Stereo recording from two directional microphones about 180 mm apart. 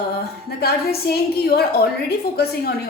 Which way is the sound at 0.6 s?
60° left (ahead or behind).